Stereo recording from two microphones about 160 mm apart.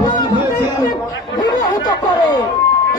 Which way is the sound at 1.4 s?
25° left (ahead or behind).